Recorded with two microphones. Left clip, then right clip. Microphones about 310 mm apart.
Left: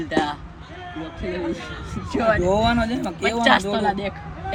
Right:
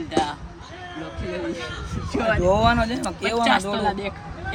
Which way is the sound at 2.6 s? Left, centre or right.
Centre.